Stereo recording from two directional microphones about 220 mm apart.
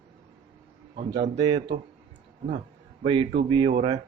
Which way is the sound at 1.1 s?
20° right (ahead or behind).